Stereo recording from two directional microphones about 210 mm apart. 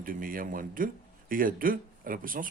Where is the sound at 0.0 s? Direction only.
40° right (ahead or behind).